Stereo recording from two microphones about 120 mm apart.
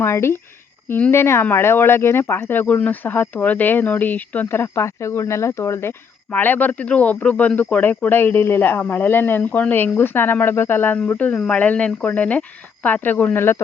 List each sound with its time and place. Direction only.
0.0 s speech: 20° left (ahead or behind)